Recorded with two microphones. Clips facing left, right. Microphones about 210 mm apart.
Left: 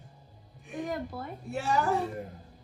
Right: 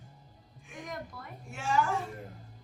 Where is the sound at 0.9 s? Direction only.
35° left (ahead or behind).